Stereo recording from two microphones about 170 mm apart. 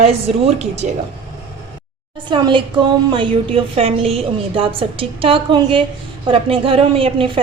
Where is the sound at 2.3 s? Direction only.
30° right (ahead or behind).